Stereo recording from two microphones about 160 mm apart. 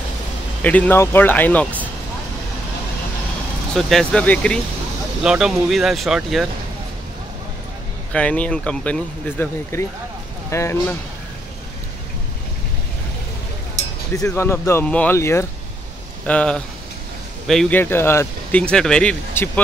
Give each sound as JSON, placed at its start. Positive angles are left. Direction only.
{"t": 0.6, "sound": "speech", "side_deg": 10}
{"t": 3.7, "sound": "speech", "side_deg": 5}
{"t": 5.2, "sound": "speech", "side_deg": -5}
{"t": 8.1, "sound": "speech", "side_deg": 10}
{"t": 14.1, "sound": "speech", "side_deg": 20}
{"t": 16.3, "sound": "speech", "side_deg": 5}
{"t": 17.7, "sound": "speech", "side_deg": 15}